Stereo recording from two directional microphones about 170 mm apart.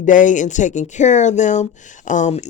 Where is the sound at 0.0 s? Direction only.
50° left (ahead or behind).